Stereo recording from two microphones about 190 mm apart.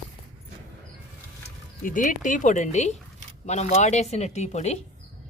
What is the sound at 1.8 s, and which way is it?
A woman's voice, 45° left (ahead or behind).